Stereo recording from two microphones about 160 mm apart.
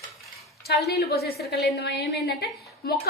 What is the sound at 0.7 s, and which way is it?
A woman's voice, 90° left.